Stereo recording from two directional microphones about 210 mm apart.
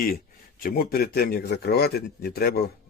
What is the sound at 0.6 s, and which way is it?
Speech, 45° left (ahead or behind).